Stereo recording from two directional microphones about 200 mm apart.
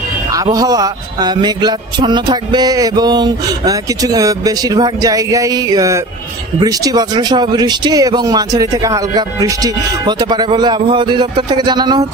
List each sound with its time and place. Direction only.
0.3 s a man's voice: 20° right (ahead or behind)